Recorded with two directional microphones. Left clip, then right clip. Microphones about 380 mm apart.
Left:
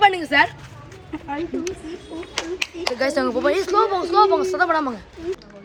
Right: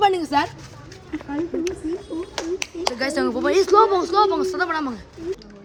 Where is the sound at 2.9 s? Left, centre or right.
Centre.